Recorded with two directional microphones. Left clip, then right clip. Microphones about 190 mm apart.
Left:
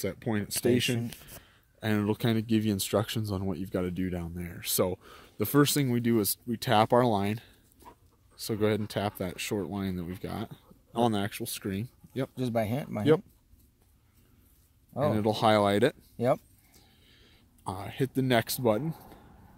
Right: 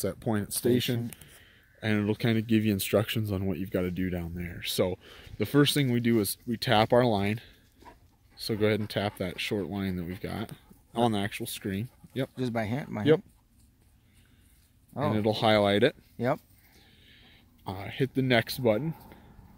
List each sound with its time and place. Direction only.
0.0 s speech: 5° right (ahead or behind)
12.4 s speech: 45° left (ahead or behind)
15.0 s speech: 5° left (ahead or behind)
17.2 s speech: 5° left (ahead or behind)